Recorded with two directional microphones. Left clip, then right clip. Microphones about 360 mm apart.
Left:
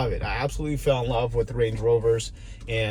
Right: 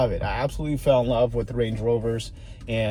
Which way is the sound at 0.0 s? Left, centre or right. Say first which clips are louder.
Right 3 dB; centre.